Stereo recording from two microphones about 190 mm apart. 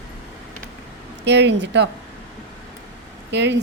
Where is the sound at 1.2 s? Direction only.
65° right (ahead or behind).